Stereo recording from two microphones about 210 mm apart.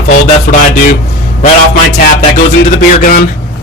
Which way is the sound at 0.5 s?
45° left (ahead or behind).